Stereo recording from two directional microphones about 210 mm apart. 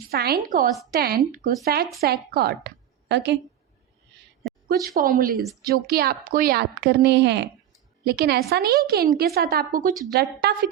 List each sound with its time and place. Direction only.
0.1 s a woman's voice: 45° right (ahead or behind)
4.8 s a woman's voice: 45° right (ahead or behind)